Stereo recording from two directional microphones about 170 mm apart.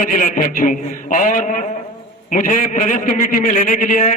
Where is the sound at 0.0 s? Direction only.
50° left (ahead or behind).